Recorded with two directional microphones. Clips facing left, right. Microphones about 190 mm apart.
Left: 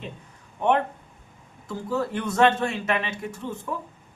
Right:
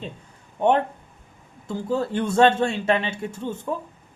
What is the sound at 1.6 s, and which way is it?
Speech, 25° right (ahead or behind).